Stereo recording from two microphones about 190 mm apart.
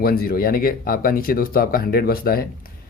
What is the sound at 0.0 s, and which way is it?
Speech, 50° left (ahead or behind).